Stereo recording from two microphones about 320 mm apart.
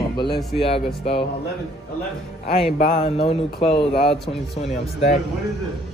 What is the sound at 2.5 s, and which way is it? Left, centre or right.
Speech, centre.